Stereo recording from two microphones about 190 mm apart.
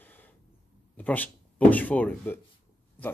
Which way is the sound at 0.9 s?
10° left (ahead or behind).